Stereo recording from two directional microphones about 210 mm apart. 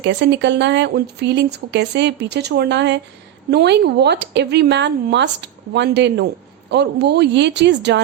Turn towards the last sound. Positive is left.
turn(degrees=-55)  # may be behind; listen again after turning